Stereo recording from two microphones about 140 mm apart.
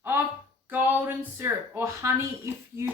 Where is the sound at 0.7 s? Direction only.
15° right (ahead or behind).